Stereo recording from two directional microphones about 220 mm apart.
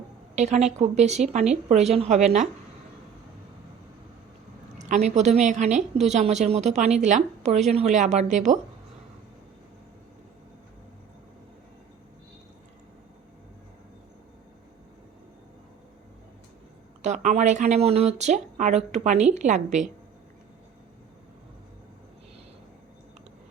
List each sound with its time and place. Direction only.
0.3 s speech: 30° right (ahead or behind)
4.9 s speech: 30° right (ahead or behind)
17.0 s speech: 30° right (ahead or behind)